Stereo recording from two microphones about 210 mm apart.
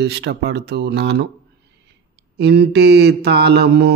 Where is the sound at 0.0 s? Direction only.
50° right (ahead or behind).